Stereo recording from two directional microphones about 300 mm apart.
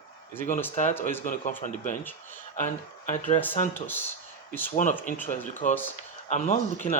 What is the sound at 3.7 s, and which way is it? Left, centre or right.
Speech, centre.